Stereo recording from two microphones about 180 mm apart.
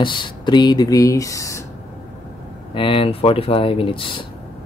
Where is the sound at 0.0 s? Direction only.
25° left (ahead or behind).